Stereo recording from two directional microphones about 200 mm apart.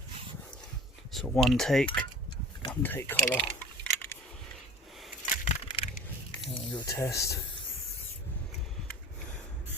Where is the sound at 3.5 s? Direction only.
10° left (ahead or behind).